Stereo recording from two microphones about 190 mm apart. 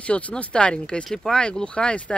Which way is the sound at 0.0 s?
5° left (ahead or behind).